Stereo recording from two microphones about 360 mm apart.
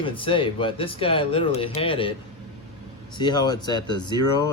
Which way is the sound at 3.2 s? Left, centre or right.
Centre.